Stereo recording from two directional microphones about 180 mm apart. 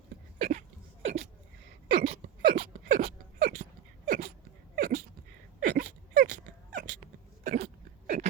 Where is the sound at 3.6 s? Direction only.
50° right (ahead or behind).